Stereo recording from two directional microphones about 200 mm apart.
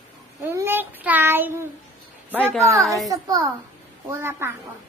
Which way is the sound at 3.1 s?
20° right (ahead or behind).